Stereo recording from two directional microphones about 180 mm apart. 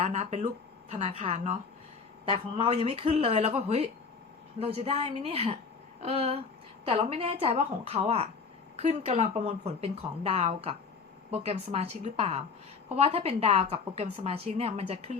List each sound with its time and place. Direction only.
0.0 s a woman's voice: 40° right (ahead or behind)